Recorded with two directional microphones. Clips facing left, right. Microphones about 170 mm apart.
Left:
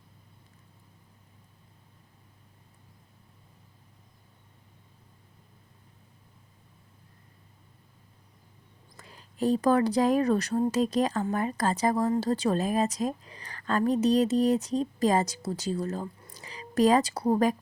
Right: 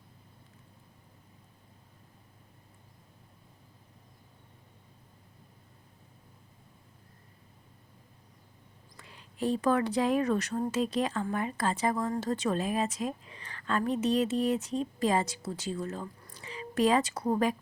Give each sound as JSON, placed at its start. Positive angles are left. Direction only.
{"t": 9.0, "sound": "a woman's voice", "side_deg": 40}